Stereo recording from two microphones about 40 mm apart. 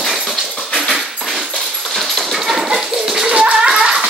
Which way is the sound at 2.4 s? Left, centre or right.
Centre.